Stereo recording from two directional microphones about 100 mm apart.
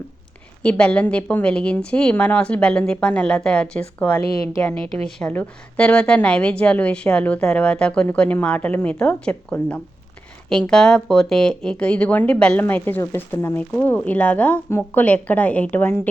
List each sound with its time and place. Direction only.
0.6 s a woman's voice: 10° left (ahead or behind)
5.3 s a woman's voice: 15° left (ahead or behind)